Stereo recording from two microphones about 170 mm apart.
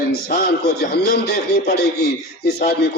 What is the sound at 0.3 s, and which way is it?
A man's voice, 75° left (ahead or behind).